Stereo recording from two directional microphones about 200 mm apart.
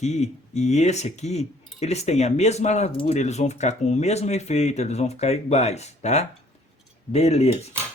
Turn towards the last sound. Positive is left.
turn(degrees=30)  # may be behind; listen again after turning